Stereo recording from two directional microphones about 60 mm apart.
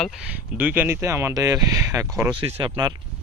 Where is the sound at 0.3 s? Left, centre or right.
Right.